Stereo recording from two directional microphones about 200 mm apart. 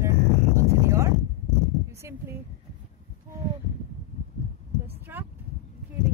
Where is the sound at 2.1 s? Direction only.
15° right (ahead or behind).